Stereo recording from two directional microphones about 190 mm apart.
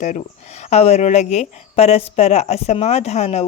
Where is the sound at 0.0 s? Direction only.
40° left (ahead or behind).